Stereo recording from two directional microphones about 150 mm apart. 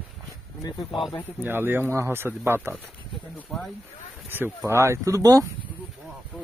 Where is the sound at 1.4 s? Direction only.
15° right (ahead or behind).